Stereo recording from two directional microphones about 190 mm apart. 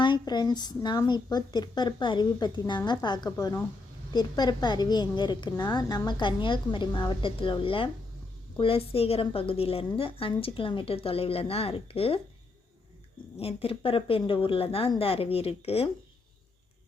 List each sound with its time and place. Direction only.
0.0 s a woman's voice: 25° left (ahead or behind)
13.4 s a woman's voice: 30° left (ahead or behind)